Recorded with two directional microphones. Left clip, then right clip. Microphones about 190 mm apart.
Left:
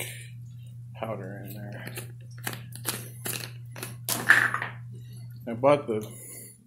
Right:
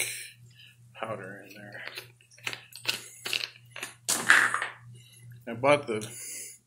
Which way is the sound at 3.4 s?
35° left (ahead or behind).